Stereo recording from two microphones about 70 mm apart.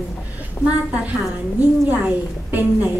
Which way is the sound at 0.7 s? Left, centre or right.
Centre.